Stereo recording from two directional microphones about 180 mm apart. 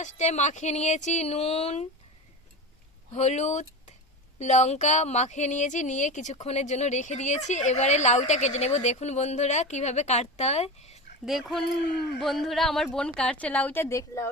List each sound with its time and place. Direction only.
0.0 s speech: 40° left (ahead or behind)
3.1 s speech: 40° left (ahead or behind)
11.3 s a woman's voice: centre (ahead or behind); by 14.3 s 15° left (ahead or behind)